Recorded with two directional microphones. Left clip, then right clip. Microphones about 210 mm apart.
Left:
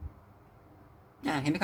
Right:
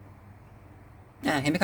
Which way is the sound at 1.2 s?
35° right (ahead or behind).